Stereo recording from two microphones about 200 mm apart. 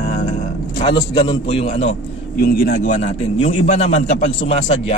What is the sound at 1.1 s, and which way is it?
Speech, 25° left (ahead or behind).